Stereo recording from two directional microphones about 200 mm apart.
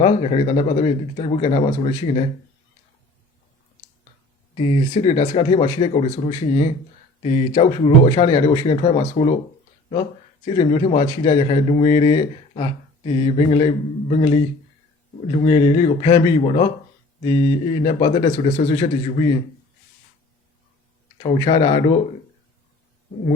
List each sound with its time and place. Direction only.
0.0 s speech: 30° left (ahead or behind)
4.5 s speech: 30° left (ahead or behind)
21.2 s speech: 25° left (ahead or behind)